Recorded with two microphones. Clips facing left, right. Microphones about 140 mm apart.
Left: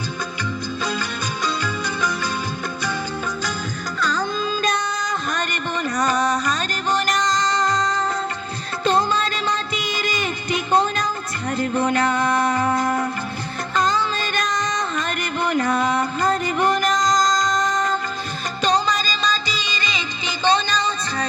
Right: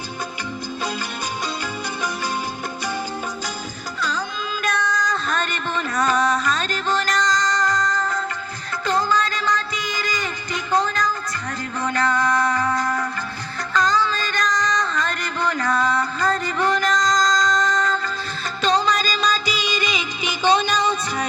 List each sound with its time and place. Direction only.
4.0 s music: 45° left (ahead or behind)
4.7 s music: 15° left (ahead or behind)
18.9 s music: 5° right (ahead or behind)